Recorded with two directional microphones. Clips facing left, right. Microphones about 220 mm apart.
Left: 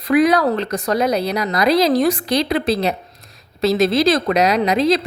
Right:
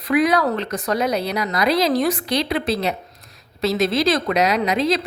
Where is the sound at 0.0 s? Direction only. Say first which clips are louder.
Left 3 dB; 40° left (ahead or behind).